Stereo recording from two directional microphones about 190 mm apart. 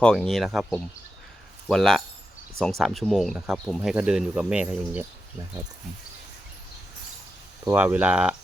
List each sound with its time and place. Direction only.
0.0 s speech: centre (ahead or behind)
7.6 s speech: 10° right (ahead or behind)